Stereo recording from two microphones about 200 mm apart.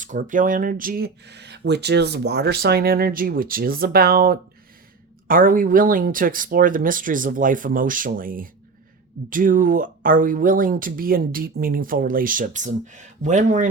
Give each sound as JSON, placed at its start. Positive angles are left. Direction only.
{"t": 0.0, "sound": "speech", "side_deg": -40}